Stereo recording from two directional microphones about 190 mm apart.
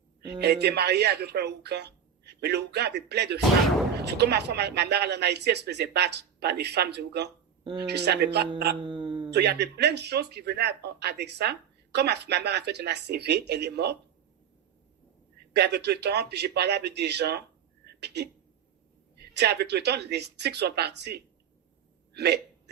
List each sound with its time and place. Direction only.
0.3 s speech: 60° right (ahead or behind)
7.6 s speech: 25° right (ahead or behind)
7.9 s speech: 60° right (ahead or behind)
8.8 s a sound: 25° right (ahead or behind)
9.3 s speech: 60° right (ahead or behind)
15.5 s speech: 60° right (ahead or behind)
22.1 s hiccup: 60° right (ahead or behind)